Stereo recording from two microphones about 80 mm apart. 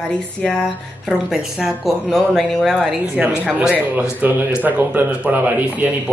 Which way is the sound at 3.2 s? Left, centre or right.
Centre.